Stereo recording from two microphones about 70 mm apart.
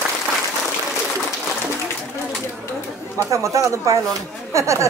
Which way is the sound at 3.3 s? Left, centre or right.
Right.